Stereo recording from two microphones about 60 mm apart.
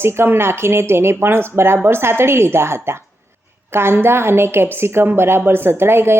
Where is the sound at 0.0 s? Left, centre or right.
Right.